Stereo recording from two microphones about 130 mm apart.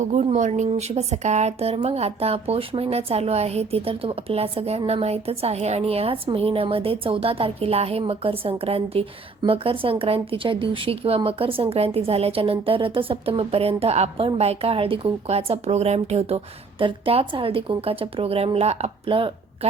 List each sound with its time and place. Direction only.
0.0 s speech: 65° right (ahead or behind)
0.7 s speech: 55° right (ahead or behind)